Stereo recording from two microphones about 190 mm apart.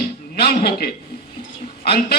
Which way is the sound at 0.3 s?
55° left (ahead or behind).